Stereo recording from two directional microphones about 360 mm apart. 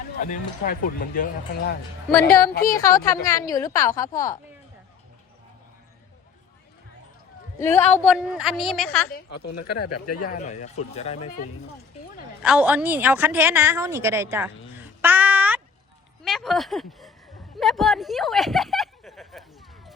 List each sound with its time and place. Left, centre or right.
0.2 s speech: left
2.8 s a woman's voice: centre
7.6 s a woman's voice: centre
9.8 s speech: left
10.2 s a woman's voice: centre
12.4 s a woman's voice: centre
15.0 s a sound: centre
16.2 s a woman's voice: centre
17.6 s a sound: centre